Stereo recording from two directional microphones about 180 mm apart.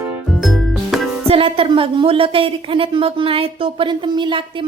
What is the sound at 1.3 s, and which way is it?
A woman's voice, 30° right (ahead or behind).